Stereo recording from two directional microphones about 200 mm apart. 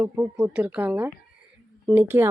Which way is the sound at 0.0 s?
10° right (ahead or behind).